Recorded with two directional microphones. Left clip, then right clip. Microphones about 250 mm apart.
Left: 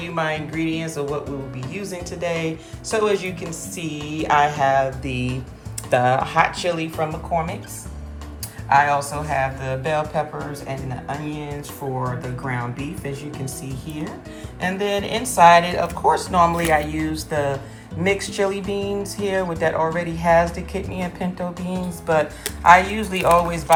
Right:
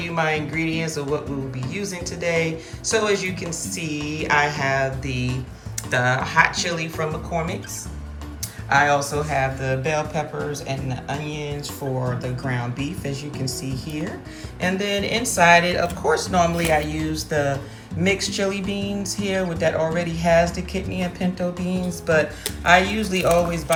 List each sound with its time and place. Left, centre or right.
0.0 s speech: centre
8.7 s speech: centre
14.8 s a woman's voice: left
15.0 s speech: centre